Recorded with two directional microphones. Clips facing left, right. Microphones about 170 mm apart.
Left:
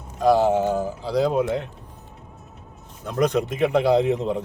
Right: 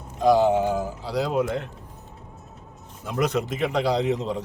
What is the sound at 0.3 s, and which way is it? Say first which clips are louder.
Speech: left 1 dB; 15° right (ahead or behind).